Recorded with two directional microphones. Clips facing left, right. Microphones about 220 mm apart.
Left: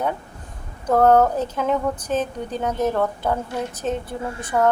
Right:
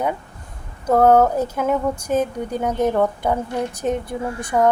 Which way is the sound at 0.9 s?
10° right (ahead or behind).